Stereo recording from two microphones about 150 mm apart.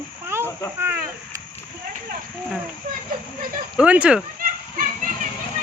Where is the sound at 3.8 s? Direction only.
10° right (ahead or behind).